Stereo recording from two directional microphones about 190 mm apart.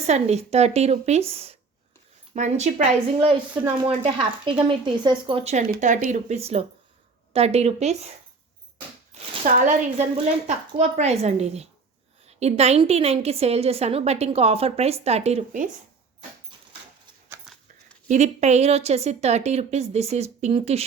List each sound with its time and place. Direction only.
0.0 s a woman's voice: 35° right (ahead or behind)
5.7 s a woman's voice: 45° right (ahead or behind)
9.4 s a woman's voice: 35° right (ahead or behind)
17.5 s dog: centre (ahead or behind)
18.1 s a woman's voice: 35° right (ahead or behind)